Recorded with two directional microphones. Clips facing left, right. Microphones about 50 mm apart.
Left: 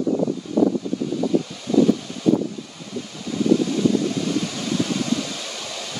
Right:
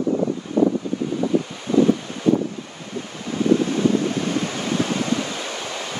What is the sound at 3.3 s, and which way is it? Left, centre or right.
Waves, right.